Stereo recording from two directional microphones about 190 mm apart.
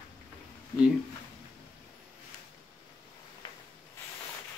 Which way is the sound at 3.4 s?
25° left (ahead or behind).